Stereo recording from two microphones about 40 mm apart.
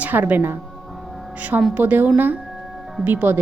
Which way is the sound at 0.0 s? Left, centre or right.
Right.